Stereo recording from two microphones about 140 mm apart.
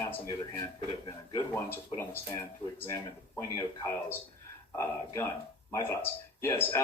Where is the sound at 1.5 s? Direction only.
15° left (ahead or behind).